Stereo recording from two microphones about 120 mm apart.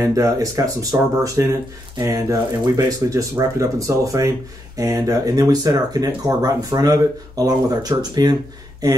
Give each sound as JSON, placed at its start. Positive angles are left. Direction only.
{"t": 0.0, "sound": "speech", "side_deg": -30}